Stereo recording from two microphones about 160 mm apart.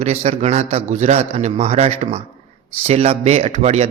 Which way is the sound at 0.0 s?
40° right (ahead or behind).